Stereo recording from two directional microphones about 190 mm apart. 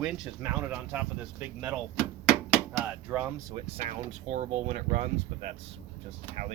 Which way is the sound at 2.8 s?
10° right (ahead or behind).